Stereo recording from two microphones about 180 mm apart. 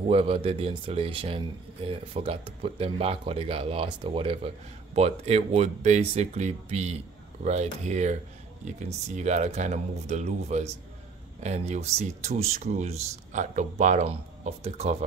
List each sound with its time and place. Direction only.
0.1 s speech: 30° right (ahead or behind)